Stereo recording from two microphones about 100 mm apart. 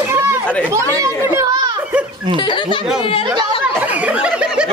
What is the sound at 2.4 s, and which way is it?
Speech, 55° left (ahead or behind).